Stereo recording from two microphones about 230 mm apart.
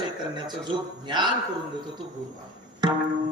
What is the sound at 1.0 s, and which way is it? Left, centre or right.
Speech, centre.